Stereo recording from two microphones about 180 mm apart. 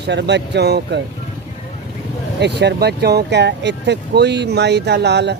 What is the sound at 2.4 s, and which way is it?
Speech, 70° right (ahead or behind).